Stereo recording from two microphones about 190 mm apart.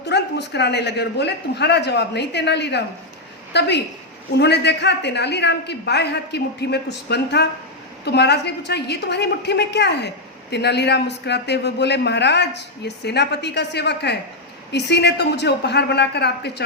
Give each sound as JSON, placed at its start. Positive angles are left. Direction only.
{"t": 0.0, "sound": "a man's voice", "side_deg": 65}